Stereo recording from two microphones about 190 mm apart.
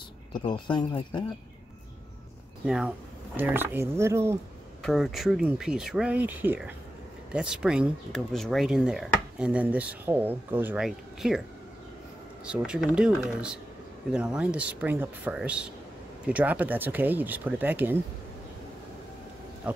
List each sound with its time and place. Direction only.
0.3 s speech: 25° left (ahead or behind)
2.6 s speech: 5° right (ahead or behind)
4.8 s speech: centre (ahead or behind)
12.4 s speech: 5° right (ahead or behind)